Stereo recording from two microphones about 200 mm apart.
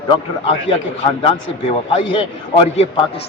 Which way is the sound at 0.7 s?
30° left (ahead or behind).